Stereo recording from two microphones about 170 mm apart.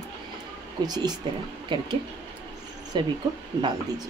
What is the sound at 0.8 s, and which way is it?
Speech, 25° right (ahead or behind).